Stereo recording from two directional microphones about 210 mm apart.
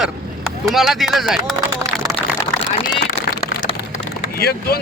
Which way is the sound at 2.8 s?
45° left (ahead or behind).